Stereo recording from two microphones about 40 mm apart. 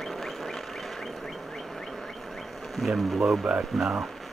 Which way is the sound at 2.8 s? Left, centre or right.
Centre.